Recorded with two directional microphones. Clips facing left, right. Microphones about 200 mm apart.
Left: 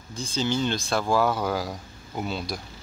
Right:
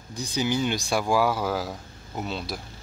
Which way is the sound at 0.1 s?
15° right (ahead or behind).